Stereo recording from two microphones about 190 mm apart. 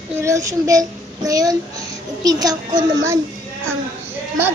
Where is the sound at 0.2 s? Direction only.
15° right (ahead or behind).